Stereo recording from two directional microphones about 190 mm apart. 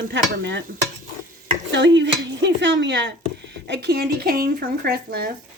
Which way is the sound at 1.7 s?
70° right (ahead or behind).